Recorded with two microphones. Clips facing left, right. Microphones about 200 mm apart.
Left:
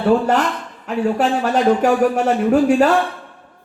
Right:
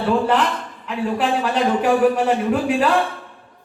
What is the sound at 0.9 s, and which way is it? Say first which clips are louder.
Speech: left 3 dB; 45° left (ahead or behind).